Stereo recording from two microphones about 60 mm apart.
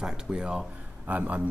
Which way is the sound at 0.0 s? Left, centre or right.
Centre.